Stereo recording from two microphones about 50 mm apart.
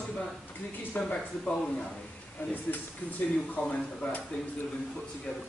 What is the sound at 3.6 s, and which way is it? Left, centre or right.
Speech, left.